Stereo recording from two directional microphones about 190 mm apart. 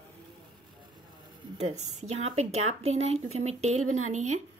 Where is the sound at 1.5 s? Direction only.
35° right (ahead or behind).